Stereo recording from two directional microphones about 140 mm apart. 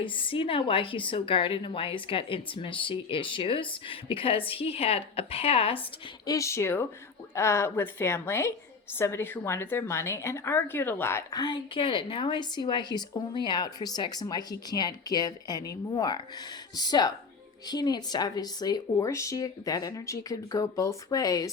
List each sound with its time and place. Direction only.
0.0 s a woman's voice: 40° left (ahead or behind)
6.2 s a woman's voice: 20° left (ahead or behind)